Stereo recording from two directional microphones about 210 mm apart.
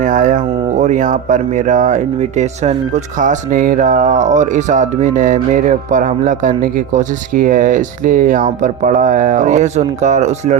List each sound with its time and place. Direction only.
0.0 s speech: 40° right (ahead or behind)